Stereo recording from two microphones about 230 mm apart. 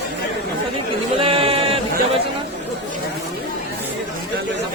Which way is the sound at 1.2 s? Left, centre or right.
Right.